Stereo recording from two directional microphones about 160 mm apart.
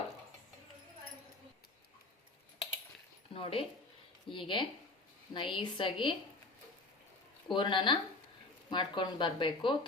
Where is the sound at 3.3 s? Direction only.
35° left (ahead or behind).